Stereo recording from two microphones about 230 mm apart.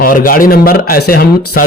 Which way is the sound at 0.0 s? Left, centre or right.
Left.